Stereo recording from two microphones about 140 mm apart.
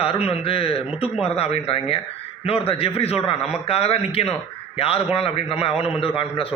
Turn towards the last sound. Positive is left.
turn(degrees=40)  # may be behind; listen again after turning